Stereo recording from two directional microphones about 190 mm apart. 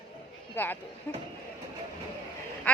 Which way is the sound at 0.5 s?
10° left (ahead or behind).